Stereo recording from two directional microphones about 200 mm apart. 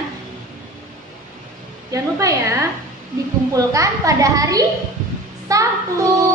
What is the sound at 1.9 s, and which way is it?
A child's voice, 15° right (ahead or behind).